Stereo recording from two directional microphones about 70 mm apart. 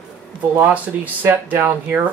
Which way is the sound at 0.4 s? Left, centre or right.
Right.